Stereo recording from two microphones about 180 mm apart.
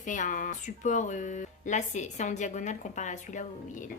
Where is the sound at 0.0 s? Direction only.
45° left (ahead or behind).